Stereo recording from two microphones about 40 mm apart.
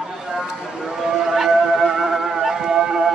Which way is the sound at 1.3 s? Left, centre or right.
Centre.